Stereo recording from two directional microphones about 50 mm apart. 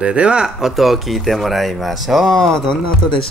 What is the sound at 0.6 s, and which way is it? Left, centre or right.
Speech, centre.